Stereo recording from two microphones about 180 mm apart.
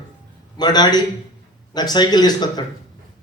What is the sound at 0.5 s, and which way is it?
A man's voice, 25° left (ahead or behind).